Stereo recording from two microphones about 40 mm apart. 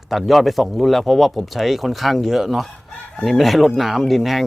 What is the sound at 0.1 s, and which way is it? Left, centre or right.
Speech, centre.